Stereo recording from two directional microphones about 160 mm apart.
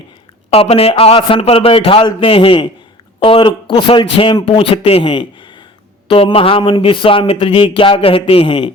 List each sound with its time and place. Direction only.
0.5 s speech: 35° left (ahead or behind)